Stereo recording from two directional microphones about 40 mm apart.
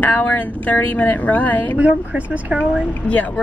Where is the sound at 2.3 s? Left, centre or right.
Right.